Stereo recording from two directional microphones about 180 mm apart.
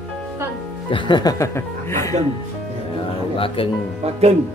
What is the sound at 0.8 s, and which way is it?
Speech, 25° left (ahead or behind).